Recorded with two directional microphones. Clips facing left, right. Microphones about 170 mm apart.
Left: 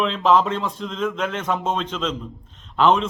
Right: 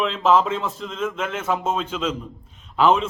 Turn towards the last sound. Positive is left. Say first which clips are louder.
# even
turn(degrees=-5)  # may be behind; listen again after turning